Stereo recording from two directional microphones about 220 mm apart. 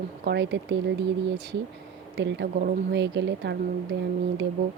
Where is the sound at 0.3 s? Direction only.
55° right (ahead or behind).